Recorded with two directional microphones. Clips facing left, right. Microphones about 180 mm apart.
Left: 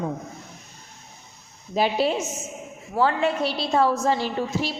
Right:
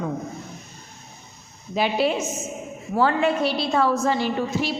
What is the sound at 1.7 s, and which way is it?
A woman's voice, 40° left (ahead or behind).